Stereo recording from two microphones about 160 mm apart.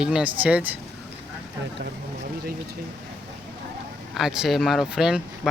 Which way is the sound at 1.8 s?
75° right (ahead or behind).